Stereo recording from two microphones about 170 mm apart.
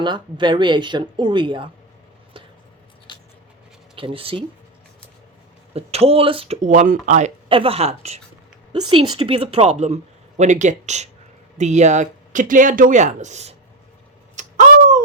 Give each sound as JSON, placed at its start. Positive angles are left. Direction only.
{"t": 0.0, "sound": "speech", "side_deg": -25}
{"t": 3.1, "sound": "a sound", "side_deg": 25}
{"t": 3.9, "sound": "a woman's voice", "side_deg": -30}
{"t": 5.7, "sound": "a woman's voice", "side_deg": -35}
{"t": 7.4, "sound": "a woman's voice", "side_deg": -30}
{"t": 14.3, "sound": "tick-tock", "side_deg": -45}